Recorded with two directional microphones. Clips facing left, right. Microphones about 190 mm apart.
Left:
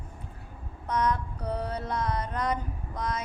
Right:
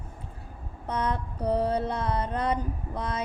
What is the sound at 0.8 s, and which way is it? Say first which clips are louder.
Mantra: left 2 dB; 30° right (ahead or behind).